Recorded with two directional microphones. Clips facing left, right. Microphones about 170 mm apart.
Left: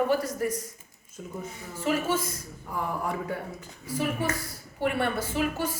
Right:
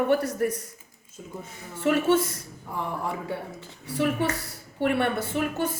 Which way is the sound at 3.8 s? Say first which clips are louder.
Right 3 dB; 70° right (ahead or behind).